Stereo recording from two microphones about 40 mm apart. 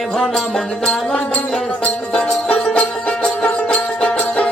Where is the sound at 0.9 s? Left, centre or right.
Left.